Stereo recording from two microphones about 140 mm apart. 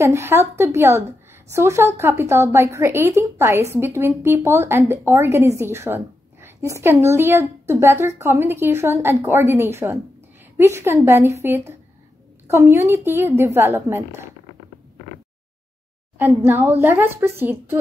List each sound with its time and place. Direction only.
0.0 s a woman's voice: 20° right (ahead or behind)
16.2 s a woman's voice: 15° right (ahead or behind)